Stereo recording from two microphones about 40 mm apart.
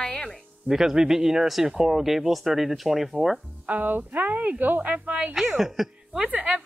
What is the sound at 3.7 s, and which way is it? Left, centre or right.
A woman's voice, right.